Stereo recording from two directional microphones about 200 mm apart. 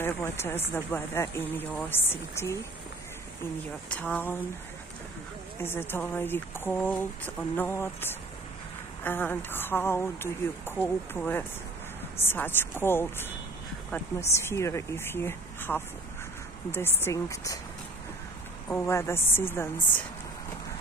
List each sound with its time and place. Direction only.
0.0 s speech: 10° left (ahead or behind)
3.9 s speech: 5° left (ahead or behind)
5.6 s speech: 10° left (ahead or behind)
18.7 s speech: 15° left (ahead or behind)